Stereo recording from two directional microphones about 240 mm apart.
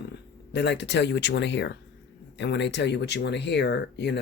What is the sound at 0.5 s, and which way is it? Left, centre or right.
Speech, left.